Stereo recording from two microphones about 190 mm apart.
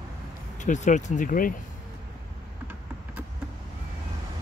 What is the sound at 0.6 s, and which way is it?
Speech, 40° left (ahead or behind).